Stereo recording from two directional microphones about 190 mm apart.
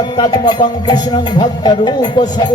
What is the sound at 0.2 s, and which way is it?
Music, 25° left (ahead or behind).